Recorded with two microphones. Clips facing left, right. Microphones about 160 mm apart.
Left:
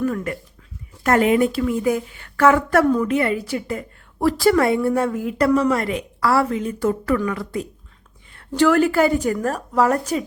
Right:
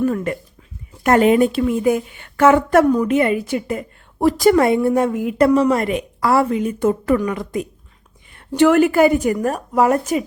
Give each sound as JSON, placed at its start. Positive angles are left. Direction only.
{"t": 0.0, "sound": "a woman's voice", "side_deg": -25}